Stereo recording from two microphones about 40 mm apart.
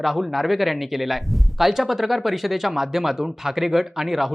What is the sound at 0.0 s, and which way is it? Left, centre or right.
Speech, centre.